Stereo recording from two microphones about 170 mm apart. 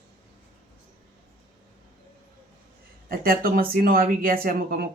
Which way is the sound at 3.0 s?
60° right (ahead or behind).